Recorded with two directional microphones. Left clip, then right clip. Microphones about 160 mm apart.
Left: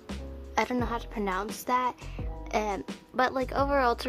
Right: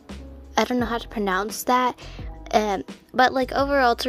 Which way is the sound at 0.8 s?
35° right (ahead or behind).